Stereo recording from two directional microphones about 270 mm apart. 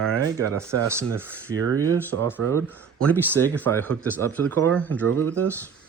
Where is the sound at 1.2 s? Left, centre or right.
Centre.